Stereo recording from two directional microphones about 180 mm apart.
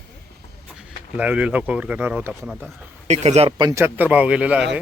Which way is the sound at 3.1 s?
35° right (ahead or behind).